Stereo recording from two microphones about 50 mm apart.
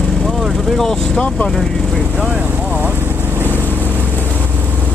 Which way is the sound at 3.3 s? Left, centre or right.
Right.